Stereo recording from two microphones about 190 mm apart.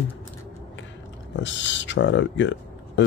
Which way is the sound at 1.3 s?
70° left (ahead or behind).